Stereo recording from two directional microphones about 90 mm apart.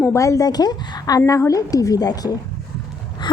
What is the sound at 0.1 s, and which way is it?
A woman's voice, 35° left (ahead or behind).